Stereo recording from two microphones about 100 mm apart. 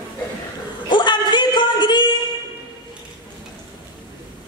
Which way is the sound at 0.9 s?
50° left (ahead or behind).